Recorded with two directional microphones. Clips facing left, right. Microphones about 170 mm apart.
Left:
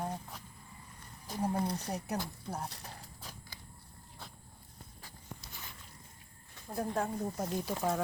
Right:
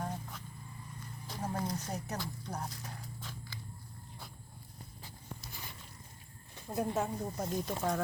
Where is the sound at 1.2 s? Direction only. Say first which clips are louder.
Left 5 dB; 15° left (ahead or behind).